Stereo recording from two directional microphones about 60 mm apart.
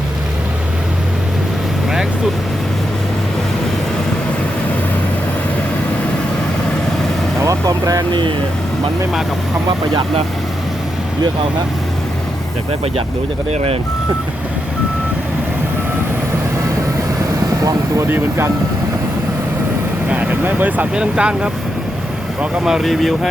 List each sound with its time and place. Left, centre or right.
7.4 s vehicle: right
17.6 s vehicle: right
18.1 s speech: right
20.5 s speech: right
22.6 s speech: centre